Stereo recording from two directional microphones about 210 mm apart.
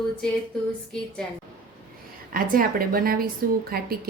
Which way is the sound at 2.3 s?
45° right (ahead or behind).